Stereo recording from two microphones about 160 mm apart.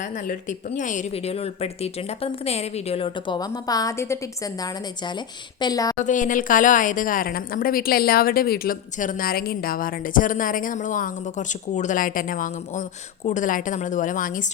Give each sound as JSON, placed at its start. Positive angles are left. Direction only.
{"t": 0.0, "sound": "a woman's voice", "side_deg": 50}
{"t": 6.1, "sound": "a woman's voice", "side_deg": 55}